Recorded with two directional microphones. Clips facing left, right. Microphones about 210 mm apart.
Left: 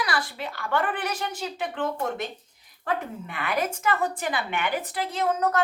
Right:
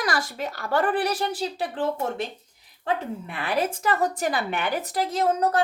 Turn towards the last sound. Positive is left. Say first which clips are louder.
# right 2 dB
turn(degrees=-40)  # may be behind; listen again after turning